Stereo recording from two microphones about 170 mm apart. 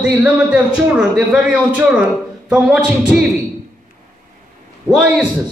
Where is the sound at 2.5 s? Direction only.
5° right (ahead or behind).